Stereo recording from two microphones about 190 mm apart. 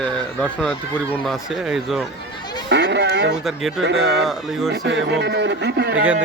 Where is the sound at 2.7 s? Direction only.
65° right (ahead or behind).